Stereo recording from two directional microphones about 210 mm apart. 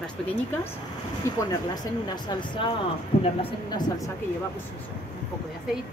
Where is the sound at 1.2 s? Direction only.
15° left (ahead or behind).